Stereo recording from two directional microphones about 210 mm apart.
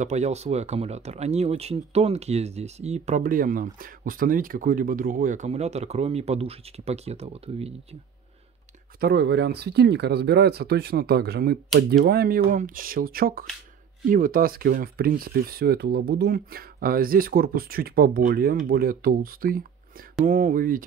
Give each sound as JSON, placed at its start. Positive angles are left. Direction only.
{"t": 0.0, "sound": "speech", "side_deg": -35}
{"t": 9.0, "sound": "speech", "side_deg": -50}